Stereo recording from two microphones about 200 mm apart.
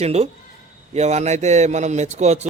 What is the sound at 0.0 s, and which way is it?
A man's voice, 30° right (ahead or behind).